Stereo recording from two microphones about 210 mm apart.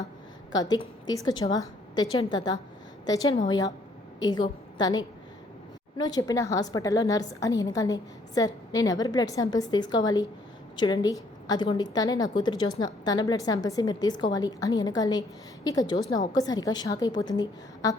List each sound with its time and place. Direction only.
0.5 s a woman's voice: 20° left (ahead or behind)